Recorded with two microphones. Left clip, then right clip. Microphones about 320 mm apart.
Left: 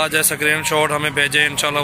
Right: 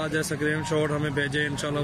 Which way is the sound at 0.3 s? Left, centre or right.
Left.